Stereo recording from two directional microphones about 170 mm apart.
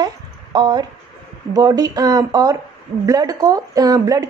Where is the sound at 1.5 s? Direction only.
25° right (ahead or behind).